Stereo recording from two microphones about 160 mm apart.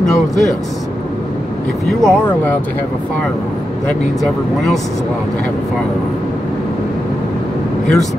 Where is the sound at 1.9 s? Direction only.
5° left (ahead or behind).